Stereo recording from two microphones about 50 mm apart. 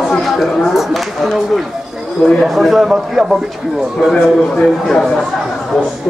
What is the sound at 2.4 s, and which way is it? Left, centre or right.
Speech, centre.